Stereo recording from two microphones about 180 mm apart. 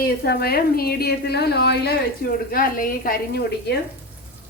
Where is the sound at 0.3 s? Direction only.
60° left (ahead or behind).